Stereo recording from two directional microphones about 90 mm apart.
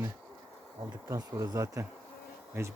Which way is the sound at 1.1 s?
40° right (ahead or behind).